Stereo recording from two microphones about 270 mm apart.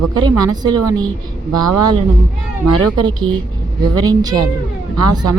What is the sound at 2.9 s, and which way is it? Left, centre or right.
Speech, centre.